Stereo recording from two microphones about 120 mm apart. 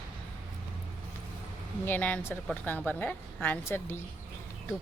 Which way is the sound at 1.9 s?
15° left (ahead or behind).